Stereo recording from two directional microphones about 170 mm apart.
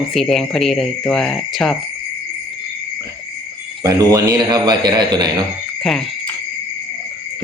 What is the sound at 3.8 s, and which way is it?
A man's voice, 20° right (ahead or behind).